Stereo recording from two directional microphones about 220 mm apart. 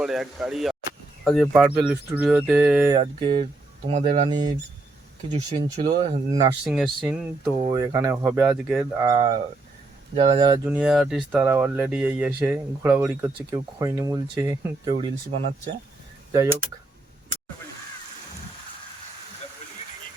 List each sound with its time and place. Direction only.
0.0 s speech: centre (ahead or behind)
2.9 s speech: 20° right (ahead or behind)
6.7 s speech: centre (ahead or behind)
7.6 s speech: 15° right (ahead or behind)
10.8 s speech: centre (ahead or behind)